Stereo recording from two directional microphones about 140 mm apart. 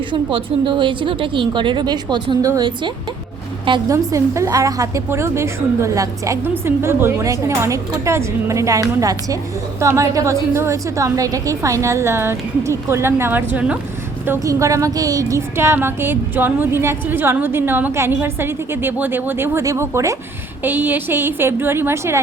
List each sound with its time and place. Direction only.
0.1 s a woman's voice: 40° right (ahead or behind)
3.7 s a woman's voice: 25° right (ahead or behind)
14.3 s a woman's voice: 25° right (ahead or behind)